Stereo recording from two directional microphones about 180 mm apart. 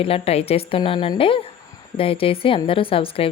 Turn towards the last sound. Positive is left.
turn(degrees=30)  # may be behind; listen again after turning